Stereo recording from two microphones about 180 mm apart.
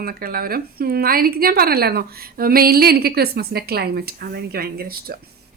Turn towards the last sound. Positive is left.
turn(degrees=-55)  # may be behind; listen again after turning